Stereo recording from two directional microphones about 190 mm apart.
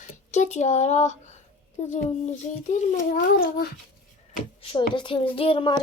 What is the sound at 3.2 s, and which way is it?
Speech, 55° left (ahead or behind).